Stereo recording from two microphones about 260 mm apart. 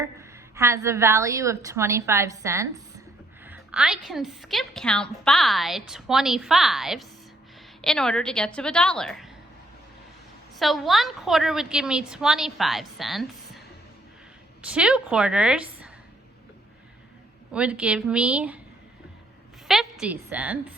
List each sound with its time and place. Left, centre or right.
0.0 s a woman's voice: centre
10.6 s a woman's voice: centre
14.6 s a woman's voice: centre
17.5 s a woman's voice: centre
19.6 s a woman's voice: centre